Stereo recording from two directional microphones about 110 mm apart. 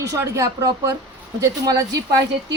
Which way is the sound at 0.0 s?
30° right (ahead or behind).